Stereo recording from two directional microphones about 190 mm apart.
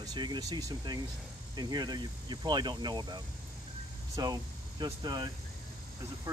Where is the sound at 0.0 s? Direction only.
20° right (ahead or behind).